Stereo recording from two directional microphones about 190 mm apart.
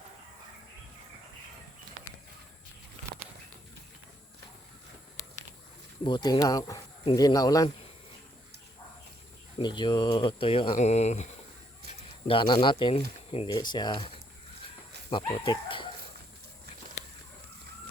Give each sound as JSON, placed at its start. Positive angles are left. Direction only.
{"t": 6.1, "sound": "speech", "side_deg": 20}
{"t": 9.6, "sound": "speech", "side_deg": 25}
{"t": 12.3, "sound": "speech", "side_deg": 25}
{"t": 15.1, "sound": "speech", "side_deg": 25}